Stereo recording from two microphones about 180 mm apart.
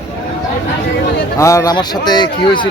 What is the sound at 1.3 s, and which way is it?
A man's voice, 15° left (ahead or behind).